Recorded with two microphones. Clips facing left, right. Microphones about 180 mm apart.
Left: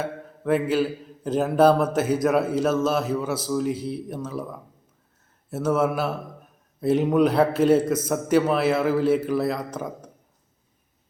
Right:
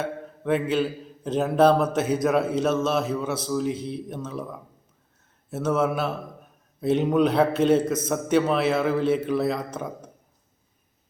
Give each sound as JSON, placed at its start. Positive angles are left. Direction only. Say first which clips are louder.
{"t": 0.0, "sound": "a man's voice", "louder": "even", "side_deg": 5}